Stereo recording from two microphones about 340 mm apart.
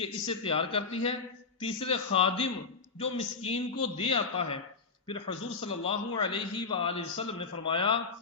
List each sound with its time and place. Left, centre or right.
0.0 s a man's voice: centre